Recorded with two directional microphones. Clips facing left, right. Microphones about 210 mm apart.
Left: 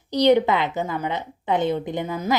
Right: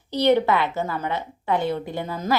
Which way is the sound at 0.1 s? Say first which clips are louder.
Left 2 dB; 15° left (ahead or behind).